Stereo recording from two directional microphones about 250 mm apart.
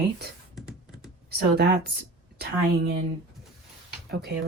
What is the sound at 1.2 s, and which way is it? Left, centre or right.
Speech, right.